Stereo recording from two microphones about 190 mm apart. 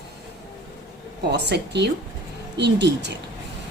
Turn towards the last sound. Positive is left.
turn(degrees=-65)  # may be behind; listen again after turning